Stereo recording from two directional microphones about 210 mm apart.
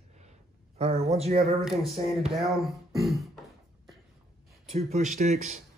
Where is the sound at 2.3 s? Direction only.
Centre (ahead or behind).